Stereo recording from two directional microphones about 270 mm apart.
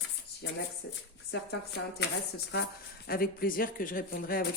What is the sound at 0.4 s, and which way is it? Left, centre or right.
Speech, left.